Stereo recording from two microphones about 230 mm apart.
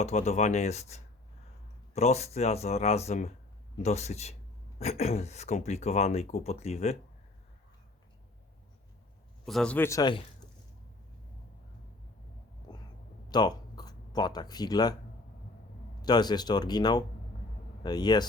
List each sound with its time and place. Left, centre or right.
0.0 s speech: left
9.5 s speech: centre
12.7 s a sound: centre
13.3 s speech: centre
16.0 s speech: centre